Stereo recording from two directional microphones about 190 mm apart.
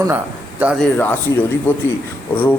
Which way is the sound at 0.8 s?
10° left (ahead or behind).